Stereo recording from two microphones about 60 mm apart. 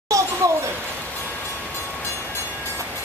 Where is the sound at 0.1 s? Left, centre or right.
Right.